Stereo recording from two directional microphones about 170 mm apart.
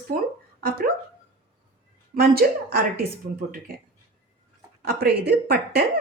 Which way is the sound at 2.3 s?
65° right (ahead or behind).